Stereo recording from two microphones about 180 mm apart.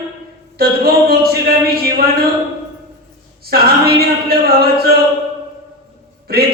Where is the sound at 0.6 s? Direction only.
55° right (ahead or behind).